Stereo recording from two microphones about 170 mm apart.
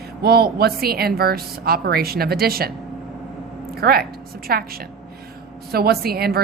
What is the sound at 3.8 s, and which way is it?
Speech, 65° right (ahead or behind).